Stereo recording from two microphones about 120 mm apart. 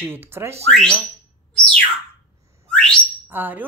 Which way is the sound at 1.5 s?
10° left (ahead or behind).